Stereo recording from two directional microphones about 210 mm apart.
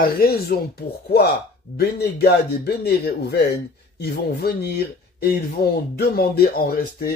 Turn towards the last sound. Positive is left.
turn(degrees=45)  # may be behind; listen again after turning